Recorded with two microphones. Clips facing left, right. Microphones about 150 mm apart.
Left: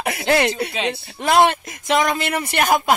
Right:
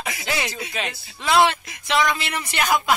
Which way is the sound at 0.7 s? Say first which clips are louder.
Left 6 dB; 25° left (ahead or behind).